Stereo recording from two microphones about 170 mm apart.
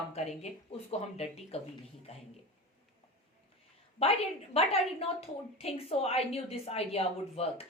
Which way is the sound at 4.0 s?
35° left (ahead or behind).